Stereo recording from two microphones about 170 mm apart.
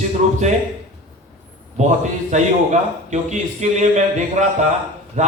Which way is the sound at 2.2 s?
45° right (ahead or behind).